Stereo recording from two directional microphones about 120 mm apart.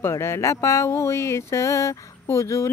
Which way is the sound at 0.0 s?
20° left (ahead or behind).